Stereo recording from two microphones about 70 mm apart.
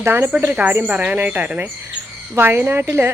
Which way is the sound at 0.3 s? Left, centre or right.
Right.